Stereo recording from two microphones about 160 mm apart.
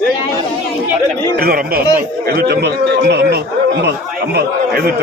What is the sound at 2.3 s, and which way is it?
A man's voice, 85° right.